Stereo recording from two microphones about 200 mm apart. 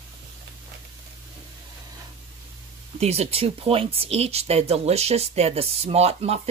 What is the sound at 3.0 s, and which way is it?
Speech, 30° right (ahead or behind).